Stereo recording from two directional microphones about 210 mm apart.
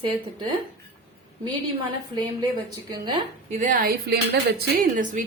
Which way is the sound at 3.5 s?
35° right (ahead or behind).